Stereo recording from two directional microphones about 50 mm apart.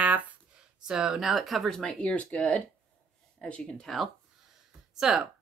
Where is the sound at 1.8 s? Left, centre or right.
Centre.